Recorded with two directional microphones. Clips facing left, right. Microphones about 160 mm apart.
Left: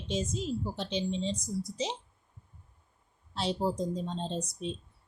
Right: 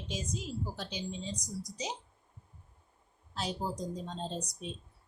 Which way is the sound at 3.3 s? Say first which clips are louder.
Left 6 dB; 30° left (ahead or behind).